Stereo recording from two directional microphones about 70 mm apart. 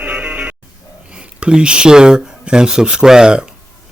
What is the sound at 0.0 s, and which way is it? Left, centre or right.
Music, centre.